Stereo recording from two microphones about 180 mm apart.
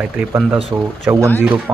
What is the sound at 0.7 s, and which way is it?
Speech, 20° right (ahead or behind).